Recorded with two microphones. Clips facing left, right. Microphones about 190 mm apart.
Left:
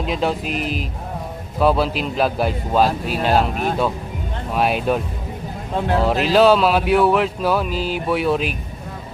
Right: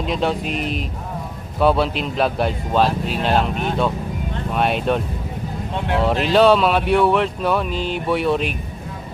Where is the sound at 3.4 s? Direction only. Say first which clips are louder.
Left 1 dB; 40° left (ahead or behind).